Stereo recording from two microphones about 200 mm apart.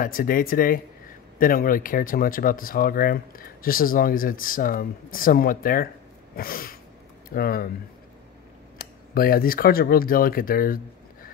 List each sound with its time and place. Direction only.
0.0 s speech: 45° left (ahead or behind)
6.3 s a sound: 45° left (ahead or behind)
7.2 s speech: 45° left (ahead or behind)
9.1 s speech: 45° left (ahead or behind)